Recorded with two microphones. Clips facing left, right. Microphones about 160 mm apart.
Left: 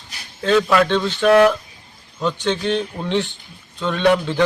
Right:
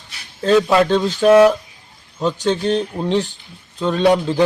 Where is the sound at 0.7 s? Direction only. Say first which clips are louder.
Right 2 dB; 35° right (ahead or behind).